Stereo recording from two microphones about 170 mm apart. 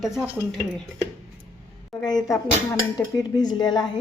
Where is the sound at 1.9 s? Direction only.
20° left (ahead or behind).